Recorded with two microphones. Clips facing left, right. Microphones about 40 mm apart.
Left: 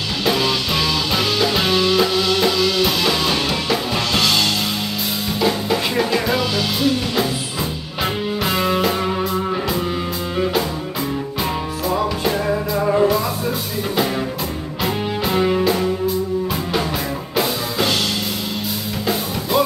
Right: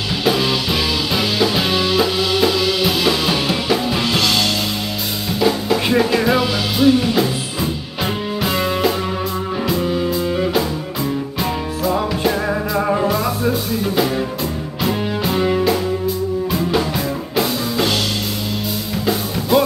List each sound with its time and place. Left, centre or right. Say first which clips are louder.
0.2 s music: right 1 dB; centre
5.4 s drum kit: right 2 dB; centre
5.8 s music: right 3 dB; centre
12.9 s music: left 1 dB; centre
19.5 s music: right 3 dB; centre